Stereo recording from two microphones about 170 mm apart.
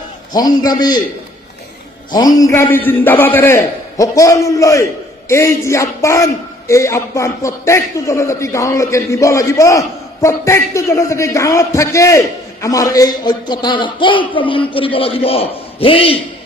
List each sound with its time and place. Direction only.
0.3 s a man's voice: 25° left (ahead or behind)
2.1 s a man's voice: 20° left (ahead or behind)